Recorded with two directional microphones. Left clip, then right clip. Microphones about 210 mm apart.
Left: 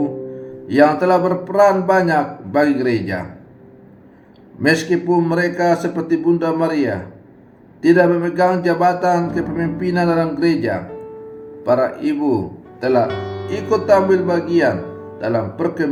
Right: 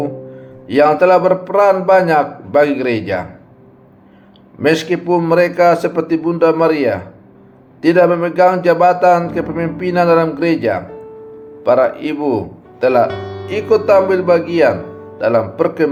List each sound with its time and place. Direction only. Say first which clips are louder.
0.7 s speech: right 4 dB; 40° right (ahead or behind)
4.6 s speech: right 2 dB; 35° right (ahead or behind)
13.1 s music: right 1 dB; centre (ahead or behind)
13.8 s speech: right 1 dB; 40° right (ahead or behind)